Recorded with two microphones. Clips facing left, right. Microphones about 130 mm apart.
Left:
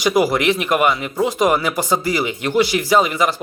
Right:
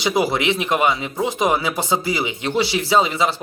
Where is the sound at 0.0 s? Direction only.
25° right (ahead or behind).